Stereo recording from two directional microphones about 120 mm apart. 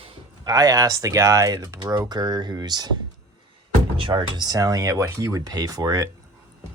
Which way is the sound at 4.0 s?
45° right (ahead or behind).